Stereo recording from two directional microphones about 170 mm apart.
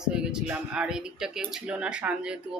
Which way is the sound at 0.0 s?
5° right (ahead or behind).